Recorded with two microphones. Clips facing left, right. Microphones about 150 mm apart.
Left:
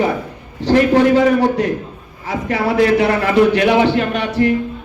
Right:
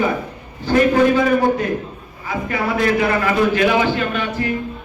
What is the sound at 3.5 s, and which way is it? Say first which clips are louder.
Speech: left 3 dB; 65° left (ahead or behind).